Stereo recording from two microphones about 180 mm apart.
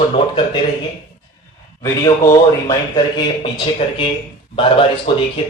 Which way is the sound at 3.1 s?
25° left (ahead or behind).